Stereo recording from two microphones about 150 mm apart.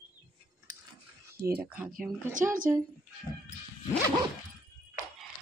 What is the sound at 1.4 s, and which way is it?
Speech, 85° right.